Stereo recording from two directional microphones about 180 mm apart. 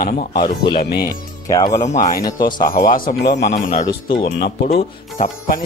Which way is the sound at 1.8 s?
40° left (ahead or behind).